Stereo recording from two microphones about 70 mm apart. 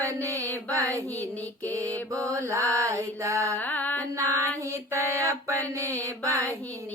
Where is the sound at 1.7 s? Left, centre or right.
Right.